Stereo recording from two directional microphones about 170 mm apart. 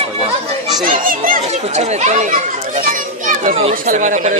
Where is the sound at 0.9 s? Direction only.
55° right (ahead or behind).